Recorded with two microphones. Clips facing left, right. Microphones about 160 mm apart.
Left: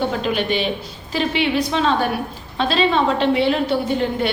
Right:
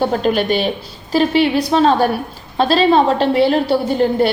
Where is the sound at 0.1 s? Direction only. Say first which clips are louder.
Right 5 dB; 45° right (ahead or behind).